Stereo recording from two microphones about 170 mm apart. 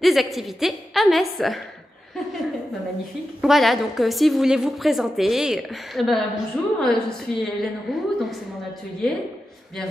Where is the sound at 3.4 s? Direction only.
Centre (ahead or behind).